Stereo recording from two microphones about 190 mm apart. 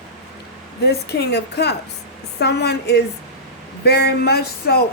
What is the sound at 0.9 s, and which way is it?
Speech, 60° left (ahead or behind).